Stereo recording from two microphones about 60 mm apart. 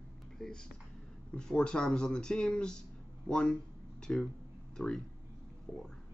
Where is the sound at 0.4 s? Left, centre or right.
Centre.